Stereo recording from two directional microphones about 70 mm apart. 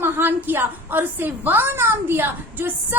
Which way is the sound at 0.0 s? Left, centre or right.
Right.